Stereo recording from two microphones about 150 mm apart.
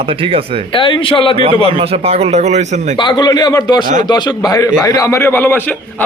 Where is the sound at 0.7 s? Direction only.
35° left (ahead or behind).